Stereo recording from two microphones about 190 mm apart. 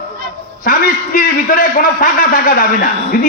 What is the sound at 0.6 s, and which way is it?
A man's voice, 45° left (ahead or behind).